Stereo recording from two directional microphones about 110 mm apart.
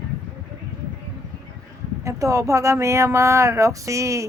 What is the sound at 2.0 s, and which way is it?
Speech, 30° right (ahead or behind).